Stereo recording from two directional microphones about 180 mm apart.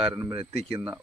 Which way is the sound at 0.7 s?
5° right (ahead or behind).